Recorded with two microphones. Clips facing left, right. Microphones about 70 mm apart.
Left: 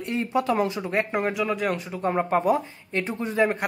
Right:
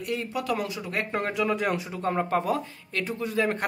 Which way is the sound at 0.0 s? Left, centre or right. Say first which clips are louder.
Left 5 dB; left.